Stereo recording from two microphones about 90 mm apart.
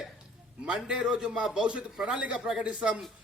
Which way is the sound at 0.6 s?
10° right (ahead or behind).